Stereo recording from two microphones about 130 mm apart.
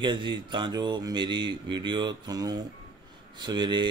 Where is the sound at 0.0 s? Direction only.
35° right (ahead or behind).